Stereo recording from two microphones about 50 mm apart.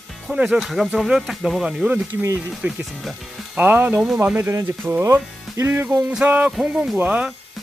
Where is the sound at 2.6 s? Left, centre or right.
Right.